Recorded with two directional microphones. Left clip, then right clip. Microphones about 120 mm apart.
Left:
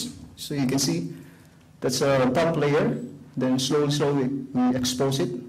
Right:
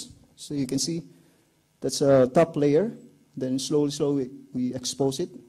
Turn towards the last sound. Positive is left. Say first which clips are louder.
# left 2 dB
turn(degrees=-40)  # may be behind; listen again after turning